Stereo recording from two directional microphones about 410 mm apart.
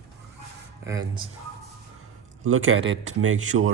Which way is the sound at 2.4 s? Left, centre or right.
Right.